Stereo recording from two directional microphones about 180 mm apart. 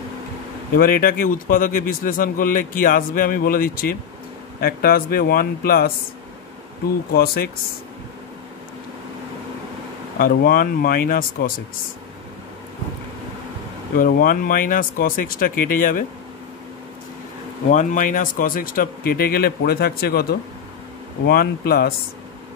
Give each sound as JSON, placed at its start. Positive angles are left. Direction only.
{"t": 0.7, "sound": "a man's voice", "side_deg": 55}
{"t": 10.1, "sound": "a man's voice", "side_deg": 50}
{"t": 13.9, "sound": "a man's voice", "side_deg": 55}
{"t": 17.6, "sound": "speech", "side_deg": 45}